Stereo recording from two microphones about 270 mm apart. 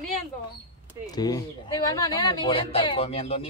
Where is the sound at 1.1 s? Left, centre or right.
Centre.